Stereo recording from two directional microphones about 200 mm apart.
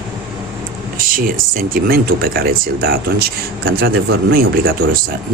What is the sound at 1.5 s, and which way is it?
Speech, 45° right (ahead or behind).